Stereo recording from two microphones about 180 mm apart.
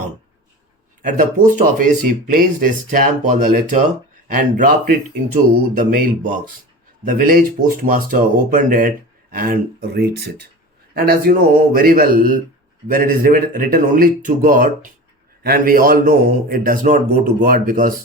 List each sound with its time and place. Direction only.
1.0 s speech: 50° right (ahead or behind)
7.0 s a man's voice: 50° right (ahead or behind)